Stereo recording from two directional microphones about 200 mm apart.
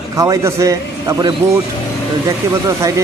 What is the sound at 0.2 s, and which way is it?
A man's voice, 15° right (ahead or behind).